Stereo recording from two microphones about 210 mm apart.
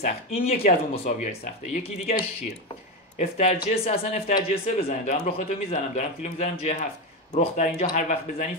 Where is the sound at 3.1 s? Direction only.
30° left (ahead or behind).